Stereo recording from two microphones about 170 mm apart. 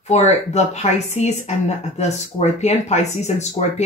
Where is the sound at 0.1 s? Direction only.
40° left (ahead or behind).